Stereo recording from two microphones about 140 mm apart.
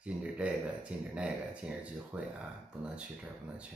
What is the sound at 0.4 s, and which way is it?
Speech, 10° right (ahead or behind).